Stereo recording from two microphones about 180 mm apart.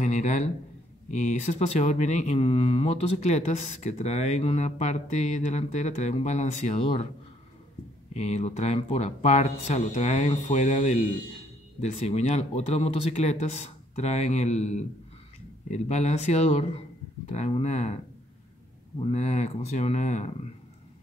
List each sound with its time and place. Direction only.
0.0 s a man's voice: 40° left (ahead or behind)
8.1 s speech: 40° left (ahead or behind)
18.9 s speech: 35° left (ahead or behind)